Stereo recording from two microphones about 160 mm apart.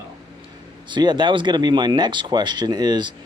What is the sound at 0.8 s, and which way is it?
Speech, 30° right (ahead or behind).